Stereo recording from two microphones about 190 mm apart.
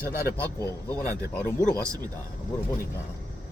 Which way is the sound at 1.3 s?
15° left (ahead or behind).